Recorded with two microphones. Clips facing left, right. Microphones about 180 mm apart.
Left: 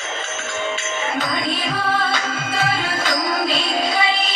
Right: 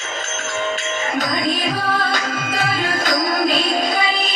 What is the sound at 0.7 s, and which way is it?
Music, 45° right (ahead or behind).